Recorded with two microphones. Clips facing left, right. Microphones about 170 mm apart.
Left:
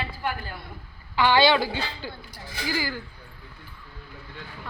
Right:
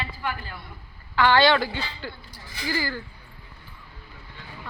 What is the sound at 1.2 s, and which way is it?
Speech, 10° left (ahead or behind).